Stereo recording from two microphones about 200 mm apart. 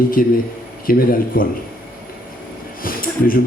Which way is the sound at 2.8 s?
45° left (ahead or behind).